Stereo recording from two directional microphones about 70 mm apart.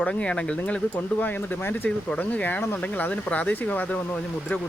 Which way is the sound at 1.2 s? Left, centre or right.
Left.